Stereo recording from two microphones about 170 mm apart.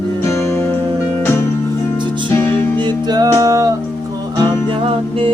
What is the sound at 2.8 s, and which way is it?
Music, 25° right (ahead or behind).